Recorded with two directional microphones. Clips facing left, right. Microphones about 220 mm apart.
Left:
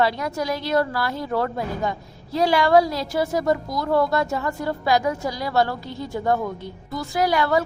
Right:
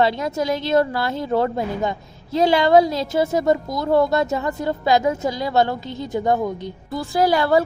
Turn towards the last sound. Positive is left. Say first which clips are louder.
# right 3 dB
turn(degrees=-30)  # may be behind; listen again after turning